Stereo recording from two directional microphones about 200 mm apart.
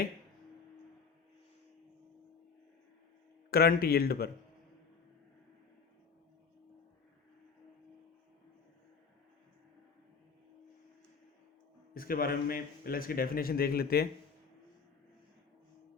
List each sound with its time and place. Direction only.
3.5 s a man's voice: 50° left (ahead or behind)
11.9 s a man's voice: 45° left (ahead or behind)